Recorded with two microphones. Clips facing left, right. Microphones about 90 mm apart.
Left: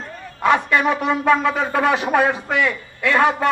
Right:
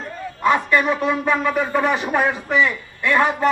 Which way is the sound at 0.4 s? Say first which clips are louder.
Left 1 dB; 80° left.